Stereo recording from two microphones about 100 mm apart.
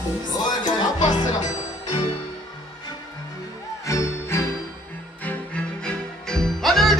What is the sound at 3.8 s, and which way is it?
Jingle bell, 30° left (ahead or behind).